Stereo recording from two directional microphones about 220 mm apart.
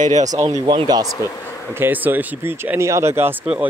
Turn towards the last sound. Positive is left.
turn(degrees=-5)  # may be behind; listen again after turning